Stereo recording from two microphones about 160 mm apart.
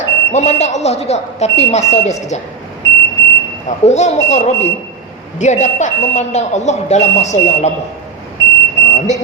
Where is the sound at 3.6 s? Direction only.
45° left (ahead or behind).